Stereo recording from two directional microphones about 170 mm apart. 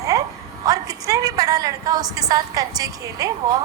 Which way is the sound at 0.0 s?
20° right (ahead or behind).